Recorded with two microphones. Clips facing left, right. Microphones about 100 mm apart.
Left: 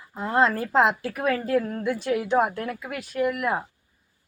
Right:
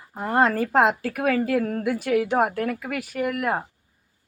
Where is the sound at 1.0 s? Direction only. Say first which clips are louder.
Right 2 dB; 70° right (ahead or behind).